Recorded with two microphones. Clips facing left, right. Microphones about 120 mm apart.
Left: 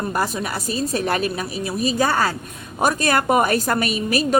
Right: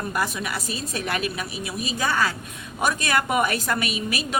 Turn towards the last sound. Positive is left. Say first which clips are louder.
# left 7 dB
turn(degrees=40)  # may be behind; listen again after turning